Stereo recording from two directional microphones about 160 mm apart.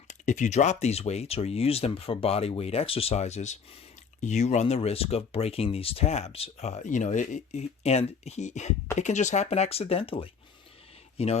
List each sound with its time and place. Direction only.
0.1 s speech: 50° left (ahead or behind)